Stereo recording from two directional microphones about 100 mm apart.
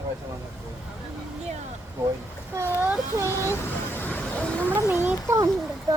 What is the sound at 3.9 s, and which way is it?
Vehicle, 20° left (ahead or behind).